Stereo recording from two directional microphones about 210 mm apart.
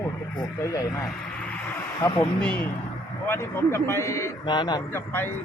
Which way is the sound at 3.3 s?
10° left (ahead or behind).